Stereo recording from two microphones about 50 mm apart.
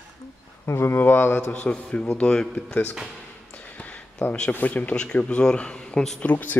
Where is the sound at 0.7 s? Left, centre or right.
Left.